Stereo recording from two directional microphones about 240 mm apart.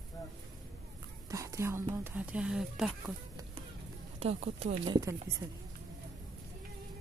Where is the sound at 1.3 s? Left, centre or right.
Centre.